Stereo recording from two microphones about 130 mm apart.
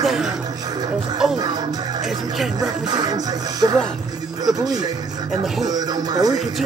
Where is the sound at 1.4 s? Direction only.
30° right (ahead or behind).